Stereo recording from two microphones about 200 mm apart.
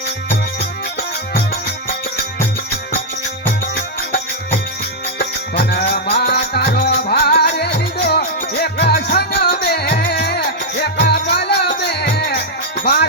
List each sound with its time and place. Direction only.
5.2 s music: 55° left (ahead or behind)